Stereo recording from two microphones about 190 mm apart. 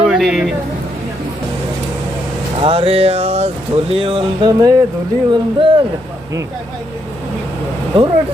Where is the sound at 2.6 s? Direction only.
30° right (ahead or behind).